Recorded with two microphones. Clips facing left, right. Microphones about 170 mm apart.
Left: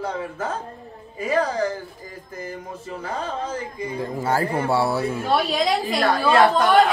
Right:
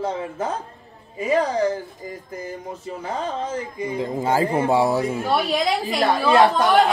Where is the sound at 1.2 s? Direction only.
20° right (ahead or behind).